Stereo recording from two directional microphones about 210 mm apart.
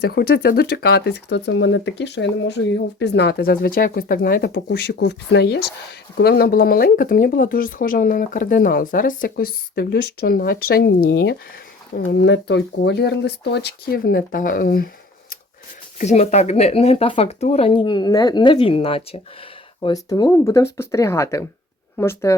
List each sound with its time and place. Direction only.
0.0 s speech: 50° left (ahead or behind)
16.0 s speech: 30° left (ahead or behind); by 22.4 s 10° left (ahead or behind)